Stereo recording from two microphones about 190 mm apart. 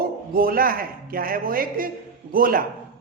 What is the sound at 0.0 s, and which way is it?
A man's voice, 50° right (ahead or behind).